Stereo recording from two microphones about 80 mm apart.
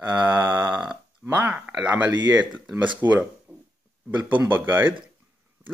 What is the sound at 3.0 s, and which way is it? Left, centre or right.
Speech, right.